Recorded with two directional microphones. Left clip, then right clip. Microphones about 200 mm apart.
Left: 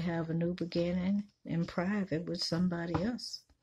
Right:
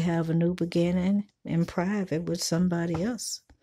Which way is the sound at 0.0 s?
45° right (ahead or behind).